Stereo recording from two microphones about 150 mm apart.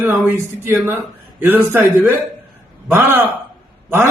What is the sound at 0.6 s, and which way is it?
A man's voice, 15° right (ahead or behind).